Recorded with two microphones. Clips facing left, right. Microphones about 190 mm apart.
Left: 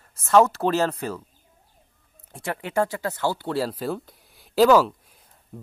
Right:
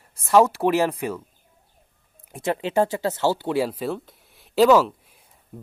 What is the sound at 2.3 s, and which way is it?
Speech, 20° right (ahead or behind).